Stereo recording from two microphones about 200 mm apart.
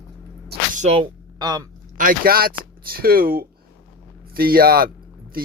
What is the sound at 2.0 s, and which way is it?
Speech, 45° right (ahead or behind).